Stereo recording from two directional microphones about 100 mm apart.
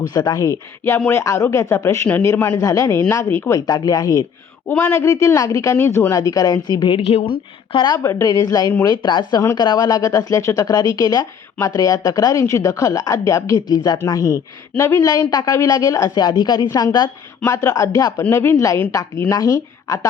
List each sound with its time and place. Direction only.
0.1 s speech: 45° left (ahead or behind)
2.2 s a man's voice: 20° left (ahead or behind)
2.6 s a man's voice: 35° left (ahead or behind)
3.7 s speech: 40° left (ahead or behind)
5.7 s a man's voice: 20° left (ahead or behind)
6.1 s speech: 35° left (ahead or behind)
7.0 s speech: 90° left
7.7 s a woman's voice: 50° left (ahead or behind)
8.0 s a woman's voice: 40° left (ahead or behind)
15.0 s a woman's voice: 35° left (ahead or behind)